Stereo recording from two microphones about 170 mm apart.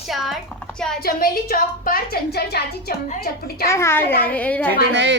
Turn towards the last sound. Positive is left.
turn(degrees=-90)